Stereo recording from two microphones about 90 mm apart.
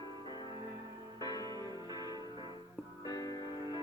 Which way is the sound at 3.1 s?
40° left (ahead or behind).